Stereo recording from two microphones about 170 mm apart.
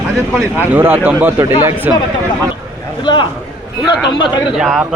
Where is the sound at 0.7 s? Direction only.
10° right (ahead or behind).